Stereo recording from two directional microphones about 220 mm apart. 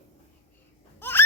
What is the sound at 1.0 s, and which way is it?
Baby cry, 10° left (ahead or behind).